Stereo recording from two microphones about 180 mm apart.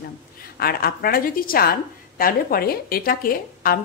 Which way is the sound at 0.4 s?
55° left (ahead or behind).